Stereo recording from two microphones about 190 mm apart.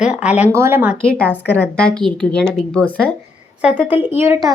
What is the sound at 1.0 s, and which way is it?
A woman's voice, 5° left (ahead or behind).